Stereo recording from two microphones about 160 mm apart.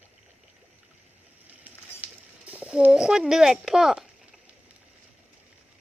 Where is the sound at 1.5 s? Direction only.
10° right (ahead or behind).